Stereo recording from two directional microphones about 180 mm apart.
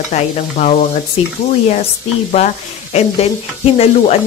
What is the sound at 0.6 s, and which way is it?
Speech, 40° left (ahead or behind).